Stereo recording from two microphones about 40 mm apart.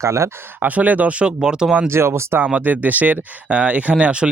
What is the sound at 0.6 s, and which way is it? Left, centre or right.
Speech, right.